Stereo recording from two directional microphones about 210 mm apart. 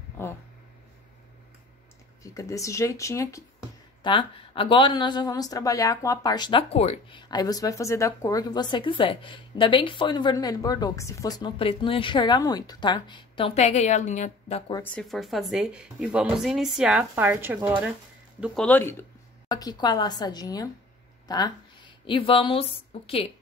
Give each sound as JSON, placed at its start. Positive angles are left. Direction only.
{"t": 0.2, "sound": "speech", "side_deg": 10}
{"t": 2.2, "sound": "a woman's voice", "side_deg": 15}
{"t": 14.8, "sound": "speech", "side_deg": 0}
{"t": 18.4, "sound": "a woman's voice", "side_deg": 5}